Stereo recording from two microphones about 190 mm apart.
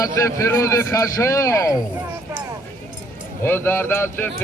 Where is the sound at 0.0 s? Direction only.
15° left (ahead or behind).